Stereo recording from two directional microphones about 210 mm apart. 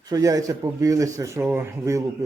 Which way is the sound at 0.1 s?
15° right (ahead or behind).